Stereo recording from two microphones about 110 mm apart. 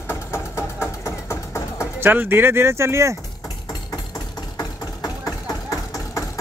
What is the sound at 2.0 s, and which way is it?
Speech, 20° right (ahead or behind).